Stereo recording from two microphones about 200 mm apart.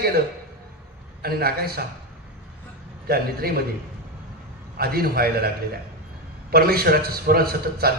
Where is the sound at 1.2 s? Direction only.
50° right (ahead or behind).